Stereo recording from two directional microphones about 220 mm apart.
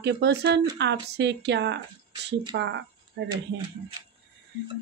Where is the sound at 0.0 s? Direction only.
50° right (ahead or behind).